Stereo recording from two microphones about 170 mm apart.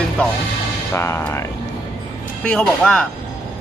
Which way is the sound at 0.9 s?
15° left (ahead or behind).